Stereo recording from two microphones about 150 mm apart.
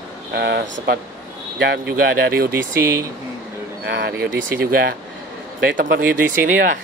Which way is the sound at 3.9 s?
90° right.